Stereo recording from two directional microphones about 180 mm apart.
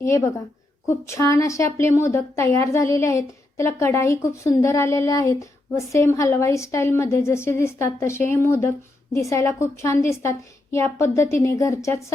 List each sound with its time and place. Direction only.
0.9 s a woman's voice: 15° left (ahead or behind)